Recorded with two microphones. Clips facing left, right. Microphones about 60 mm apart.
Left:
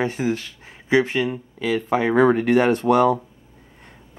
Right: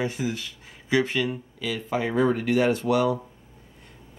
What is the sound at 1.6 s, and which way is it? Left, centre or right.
Speech, left.